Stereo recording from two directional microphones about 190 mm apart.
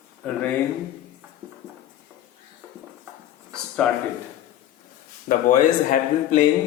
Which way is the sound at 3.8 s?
5° left (ahead or behind).